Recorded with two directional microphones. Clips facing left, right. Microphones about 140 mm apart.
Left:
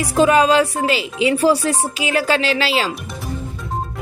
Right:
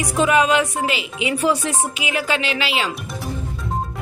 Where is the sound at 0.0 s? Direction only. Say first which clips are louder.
Left 3 dB; 30° left (ahead or behind).